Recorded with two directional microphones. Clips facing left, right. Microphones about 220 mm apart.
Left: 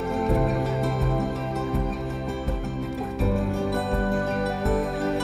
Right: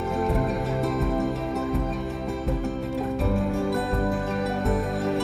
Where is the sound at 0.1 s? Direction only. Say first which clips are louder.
Left 2 dB; centre (ahead or behind).